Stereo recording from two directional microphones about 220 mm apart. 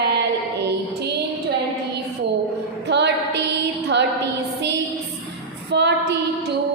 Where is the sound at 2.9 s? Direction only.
50° right (ahead or behind).